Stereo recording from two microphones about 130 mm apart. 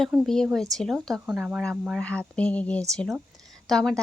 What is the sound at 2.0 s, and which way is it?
Speech, 10° left (ahead or behind).